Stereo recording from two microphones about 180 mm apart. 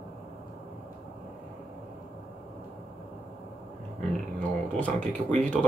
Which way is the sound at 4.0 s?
5° left (ahead or behind).